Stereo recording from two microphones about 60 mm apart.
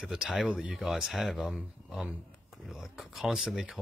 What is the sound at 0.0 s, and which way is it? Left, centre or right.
Speech, centre.